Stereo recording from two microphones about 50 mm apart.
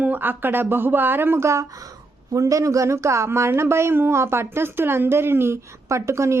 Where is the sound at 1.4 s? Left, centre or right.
Right.